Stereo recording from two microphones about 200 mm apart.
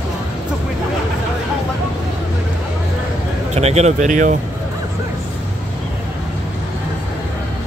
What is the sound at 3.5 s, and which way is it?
Speech, 30° right (ahead or behind).